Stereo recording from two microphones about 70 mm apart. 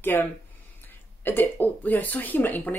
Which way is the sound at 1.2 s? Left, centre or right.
Left.